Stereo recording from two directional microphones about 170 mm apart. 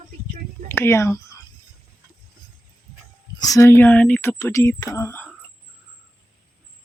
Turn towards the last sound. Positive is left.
turn(degrees=15)  # may be behind; listen again after turning